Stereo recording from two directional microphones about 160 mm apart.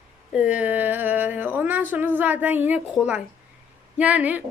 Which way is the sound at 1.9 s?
15° right (ahead or behind).